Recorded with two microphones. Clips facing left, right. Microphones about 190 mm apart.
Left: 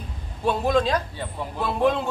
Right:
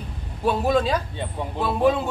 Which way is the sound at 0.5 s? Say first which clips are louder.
Right 1 dB; 5° right (ahead or behind).